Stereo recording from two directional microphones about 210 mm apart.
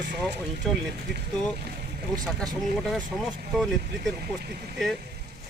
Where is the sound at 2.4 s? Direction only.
Centre (ahead or behind).